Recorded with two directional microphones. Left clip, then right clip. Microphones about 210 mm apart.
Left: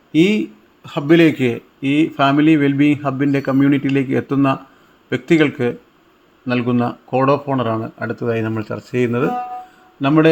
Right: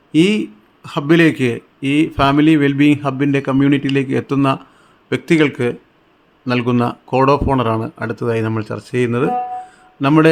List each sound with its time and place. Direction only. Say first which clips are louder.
0.1 s a man's voice: right 1 dB; 15° right (ahead or behind)